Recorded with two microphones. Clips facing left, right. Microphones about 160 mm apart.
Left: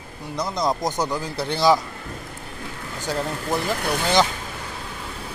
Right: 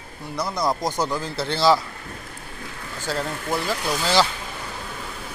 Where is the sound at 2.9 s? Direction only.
20° left (ahead or behind).